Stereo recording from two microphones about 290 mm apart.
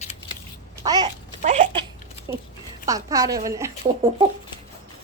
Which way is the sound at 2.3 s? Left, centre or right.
Centre.